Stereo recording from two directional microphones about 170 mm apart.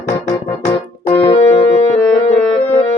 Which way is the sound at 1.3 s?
35° left (ahead or behind).